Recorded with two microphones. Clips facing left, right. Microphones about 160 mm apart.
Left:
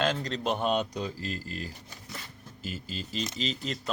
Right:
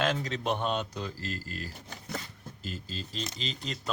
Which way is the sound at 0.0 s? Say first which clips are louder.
Left 1 dB; centre (ahead or behind).